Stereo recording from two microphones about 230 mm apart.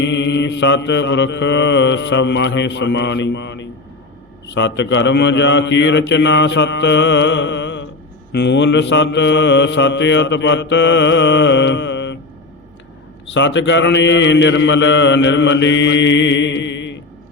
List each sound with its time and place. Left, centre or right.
0.0 s mantra: left
13.3 s mantra: left